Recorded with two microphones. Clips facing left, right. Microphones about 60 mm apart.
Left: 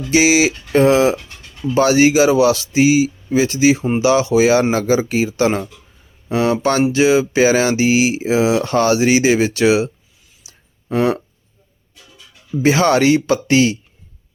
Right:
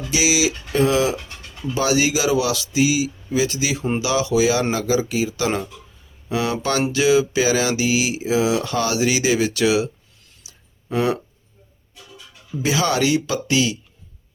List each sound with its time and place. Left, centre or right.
0.1 s speech: left
10.4 s a sound: left
12.6 s speech: left